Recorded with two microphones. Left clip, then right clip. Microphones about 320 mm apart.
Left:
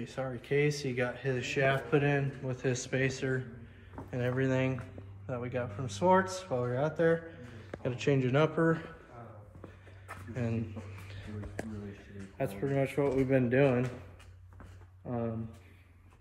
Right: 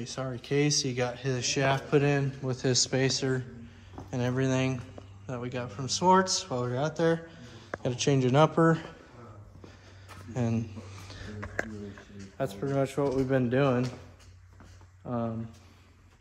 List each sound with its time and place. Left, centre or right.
0.0 s speech: centre
10.3 s speech: centre
12.4 s speech: centre
15.0 s speech: centre